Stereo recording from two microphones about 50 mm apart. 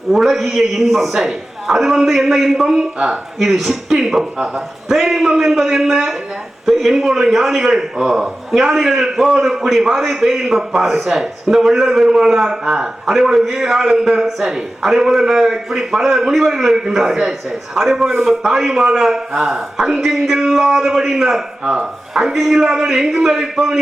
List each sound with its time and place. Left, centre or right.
0.1 s a man's voice: centre
3.3 s a man's voice: centre
4.4 s a man's voice: centre
4.9 s a man's voice: centre
21.6 s a man's voice: right
22.1 s a man's voice: centre